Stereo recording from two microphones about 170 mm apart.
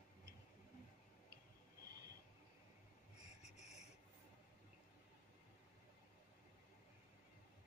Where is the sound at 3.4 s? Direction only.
40° left (ahead or behind).